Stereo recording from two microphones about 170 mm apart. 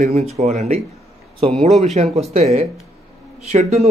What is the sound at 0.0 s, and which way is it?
Speech, 40° right (ahead or behind).